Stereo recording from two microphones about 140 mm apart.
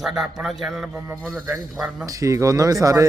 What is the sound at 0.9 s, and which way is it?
Speech, 15° right (ahead or behind).